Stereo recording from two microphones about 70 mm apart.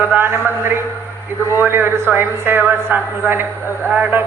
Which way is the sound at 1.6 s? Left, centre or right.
Right.